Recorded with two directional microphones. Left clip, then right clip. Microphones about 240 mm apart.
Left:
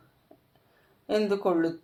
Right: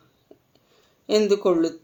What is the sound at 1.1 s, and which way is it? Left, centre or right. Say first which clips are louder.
Speech: right 6 dB; right.